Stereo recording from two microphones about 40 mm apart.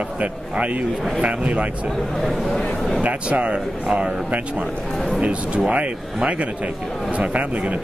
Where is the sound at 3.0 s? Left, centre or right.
Right.